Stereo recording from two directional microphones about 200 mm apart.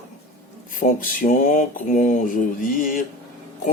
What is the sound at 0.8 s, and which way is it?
Speech, 40° left (ahead or behind).